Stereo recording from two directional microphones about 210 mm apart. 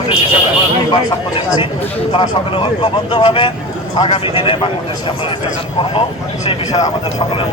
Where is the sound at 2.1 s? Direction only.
25° left (ahead or behind).